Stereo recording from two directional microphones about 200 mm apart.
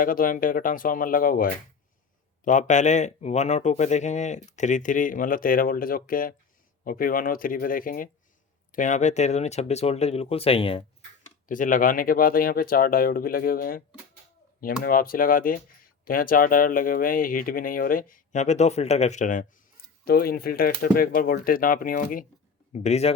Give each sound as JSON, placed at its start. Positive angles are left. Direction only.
{"t": 0.0, "sound": "speech", "side_deg": 45}
{"t": 11.4, "sound": "speech", "side_deg": 40}
{"t": 20.1, "sound": "speech", "side_deg": 50}